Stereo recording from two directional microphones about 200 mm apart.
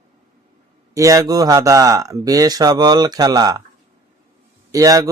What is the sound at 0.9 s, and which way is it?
Speech, 15° right (ahead or behind).